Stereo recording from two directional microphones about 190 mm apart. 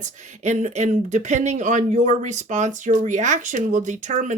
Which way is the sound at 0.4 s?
40° right (ahead or behind).